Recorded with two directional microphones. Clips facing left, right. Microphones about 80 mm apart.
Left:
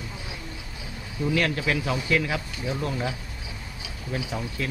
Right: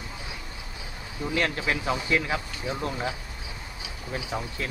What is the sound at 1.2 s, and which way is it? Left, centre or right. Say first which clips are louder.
Speech: left 2 dB; right.